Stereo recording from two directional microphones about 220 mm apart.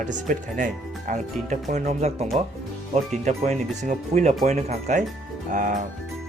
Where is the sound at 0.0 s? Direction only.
35° right (ahead or behind).